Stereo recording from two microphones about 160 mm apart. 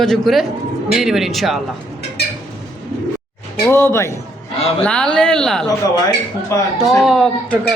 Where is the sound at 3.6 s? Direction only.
15° left (ahead or behind).